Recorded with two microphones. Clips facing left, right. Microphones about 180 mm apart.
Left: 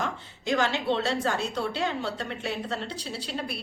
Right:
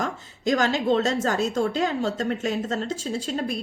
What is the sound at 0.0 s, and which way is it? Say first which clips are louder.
A woman's voice: right 5 dB; 40° right (ahead or behind).